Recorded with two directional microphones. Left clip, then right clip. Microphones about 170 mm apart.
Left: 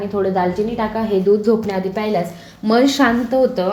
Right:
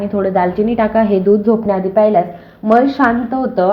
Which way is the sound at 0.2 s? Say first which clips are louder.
Right 3 dB; 15° right (ahead or behind).